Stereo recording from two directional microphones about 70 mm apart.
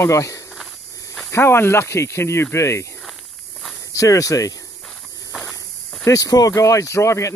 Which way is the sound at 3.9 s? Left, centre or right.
Left.